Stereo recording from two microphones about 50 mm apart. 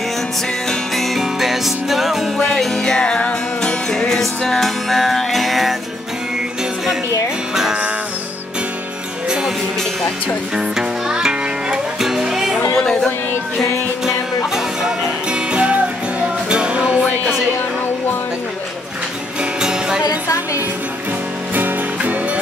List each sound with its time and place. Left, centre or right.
0.7 s music: centre
2.5 s music: centre
3.9 s music: centre
10.5 s music: centre
12.7 s music: centre
14.0 s music: centre
19.6 s music: centre
21.5 s music: right